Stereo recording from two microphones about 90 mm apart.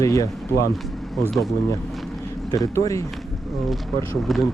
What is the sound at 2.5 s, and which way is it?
Speech, 40° left (ahead or behind).